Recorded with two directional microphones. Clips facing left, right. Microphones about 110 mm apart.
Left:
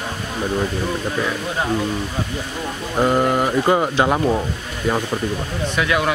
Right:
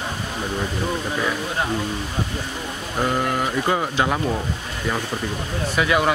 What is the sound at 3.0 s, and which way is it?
Speech, 25° left (ahead or behind).